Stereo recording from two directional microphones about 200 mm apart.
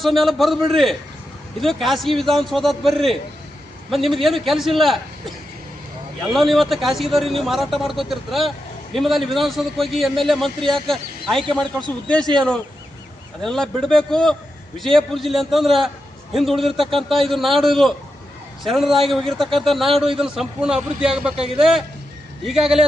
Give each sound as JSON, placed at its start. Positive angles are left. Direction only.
{"t": 0.0, "sound": "a man's voice", "side_deg": 0}
{"t": 6.3, "sound": "a man's voice", "side_deg": 0}
{"t": 13.4, "sound": "a man's voice", "side_deg": 0}